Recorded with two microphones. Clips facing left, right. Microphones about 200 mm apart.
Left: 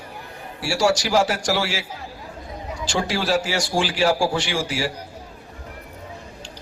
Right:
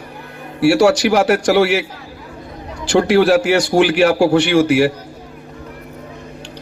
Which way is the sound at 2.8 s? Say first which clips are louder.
Right 12 dB; 65° right (ahead or behind).